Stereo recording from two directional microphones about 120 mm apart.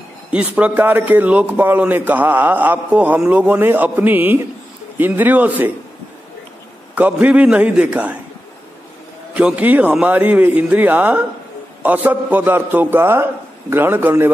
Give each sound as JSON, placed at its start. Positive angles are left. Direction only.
{"t": 0.3, "sound": "a man's voice", "side_deg": -10}
{"t": 7.0, "sound": "a man's voice", "side_deg": -10}
{"t": 9.3, "sound": "a man's voice", "side_deg": -10}